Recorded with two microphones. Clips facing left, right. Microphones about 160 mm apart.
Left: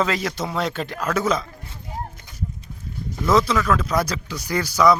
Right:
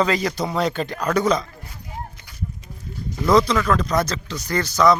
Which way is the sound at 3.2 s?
5° left (ahead or behind).